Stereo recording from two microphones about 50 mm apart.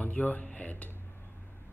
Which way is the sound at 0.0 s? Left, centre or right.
Left.